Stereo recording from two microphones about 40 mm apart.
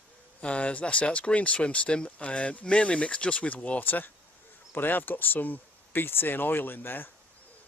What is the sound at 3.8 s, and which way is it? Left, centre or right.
Speech, left.